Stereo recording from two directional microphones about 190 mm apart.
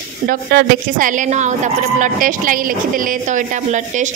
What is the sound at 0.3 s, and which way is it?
A woman's voice, 50° right (ahead or behind).